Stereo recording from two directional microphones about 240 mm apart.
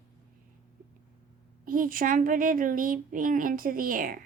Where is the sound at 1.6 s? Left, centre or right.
Right.